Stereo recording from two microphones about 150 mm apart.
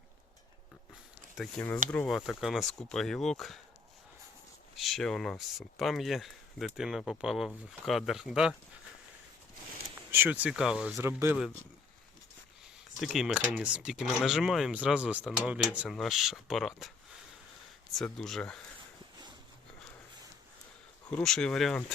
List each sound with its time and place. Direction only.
1.6 s speech: 5° left (ahead or behind)
4.8 s speech: centre (ahead or behind)
10.1 s speech: 10° right (ahead or behind)
10.9 s speech: 15° right (ahead or behind)
13.0 s speech: centre (ahead or behind)
17.9 s speech: 5° left (ahead or behind)
21.1 s speech: 5° left (ahead or behind)